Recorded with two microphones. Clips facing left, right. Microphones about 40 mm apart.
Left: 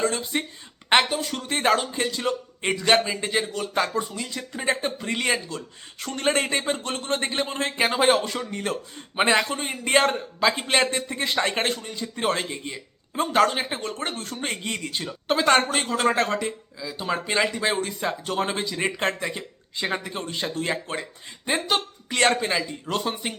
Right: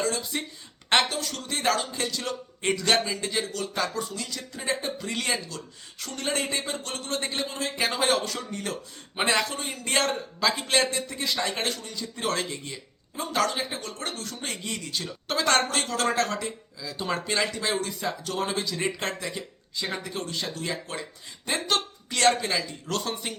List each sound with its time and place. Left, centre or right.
0.0 s speech: left
0.9 s a man's voice: centre; by 7.9 s left
7.9 s a man's voice: left
13.1 s a man's voice: left
16.8 s speech: centre
17.2 s a man's voice: left
21.5 s a man's voice: centre